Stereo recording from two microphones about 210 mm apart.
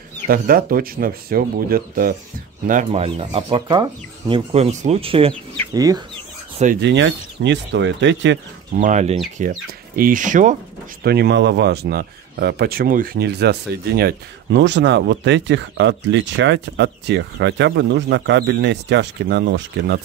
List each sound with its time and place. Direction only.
0.3 s speech: 45° right (ahead or behind); by 6.0 s 15° right (ahead or behind)
6.8 s speech: 55° right (ahead or behind)
8.7 s speech: 35° right (ahead or behind)
11.1 s speech: 55° right (ahead or behind)